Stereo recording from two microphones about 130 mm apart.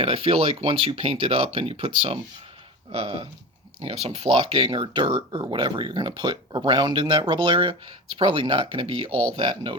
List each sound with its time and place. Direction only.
0.0 s speech: 45° right (ahead or behind)